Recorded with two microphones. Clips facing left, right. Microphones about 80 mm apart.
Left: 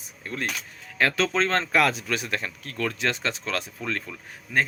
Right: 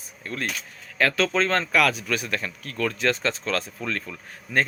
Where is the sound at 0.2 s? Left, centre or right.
Left.